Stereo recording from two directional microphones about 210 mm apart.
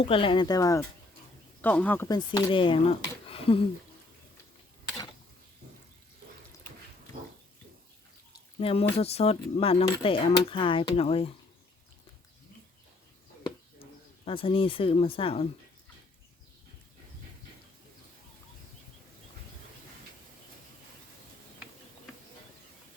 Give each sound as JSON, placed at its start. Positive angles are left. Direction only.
{"t": 0.0, "sound": "speech", "side_deg": 25}
{"t": 2.0, "sound": "speech", "side_deg": 20}
{"t": 3.2, "sound": "a sound", "side_deg": 25}
{"t": 8.5, "sound": "speech", "side_deg": 25}
{"t": 14.3, "sound": "speech", "side_deg": 25}